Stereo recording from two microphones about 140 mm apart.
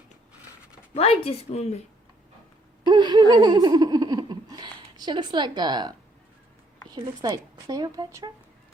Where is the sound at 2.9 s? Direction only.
30° right (ahead or behind).